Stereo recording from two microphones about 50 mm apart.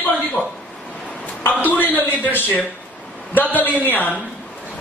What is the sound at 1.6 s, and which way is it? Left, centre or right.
A man's voice, left.